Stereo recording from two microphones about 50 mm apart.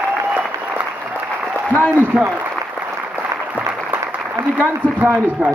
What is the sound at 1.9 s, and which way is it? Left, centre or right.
Speech, right.